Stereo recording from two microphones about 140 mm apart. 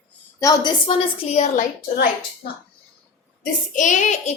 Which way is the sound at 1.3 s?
55° left (ahead or behind).